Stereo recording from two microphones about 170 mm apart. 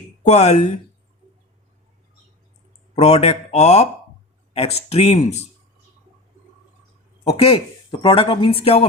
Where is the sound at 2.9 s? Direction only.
40° left (ahead or behind).